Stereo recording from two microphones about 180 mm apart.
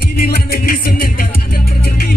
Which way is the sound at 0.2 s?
55° left (ahead or behind).